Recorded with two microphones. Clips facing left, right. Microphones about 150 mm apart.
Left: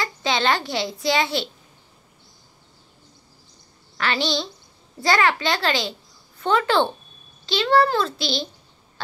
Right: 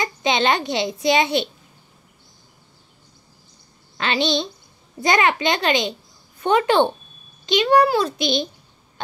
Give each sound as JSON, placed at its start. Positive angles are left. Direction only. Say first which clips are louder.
{"t": 0.0, "sound": "a child's voice", "louder": "right 3 dB", "side_deg": -20}
{"t": 4.0, "sound": "a child's voice", "louder": "right 3 dB", "side_deg": -20}